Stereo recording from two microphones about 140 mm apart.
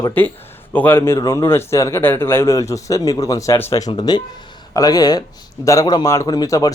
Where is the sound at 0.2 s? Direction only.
15° left (ahead or behind).